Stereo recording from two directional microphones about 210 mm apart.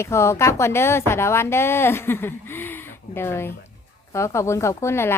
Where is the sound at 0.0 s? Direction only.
15° left (ahead or behind).